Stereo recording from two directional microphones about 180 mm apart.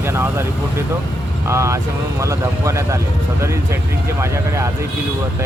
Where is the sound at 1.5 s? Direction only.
15° right (ahead or behind).